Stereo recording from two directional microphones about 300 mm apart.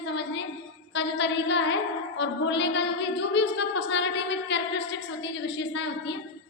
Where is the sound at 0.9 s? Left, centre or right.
Left.